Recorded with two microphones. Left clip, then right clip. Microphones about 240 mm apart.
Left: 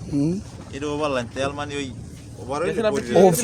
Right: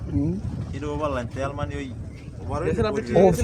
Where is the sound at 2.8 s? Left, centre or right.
Centre.